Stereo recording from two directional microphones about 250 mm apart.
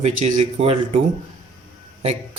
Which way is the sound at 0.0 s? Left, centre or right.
Right.